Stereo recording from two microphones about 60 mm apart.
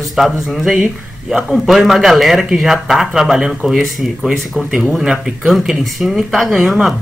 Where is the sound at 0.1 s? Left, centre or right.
Centre.